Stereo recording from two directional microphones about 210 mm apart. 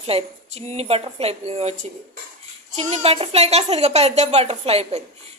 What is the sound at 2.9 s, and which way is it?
A woman's voice, 30° right (ahead or behind).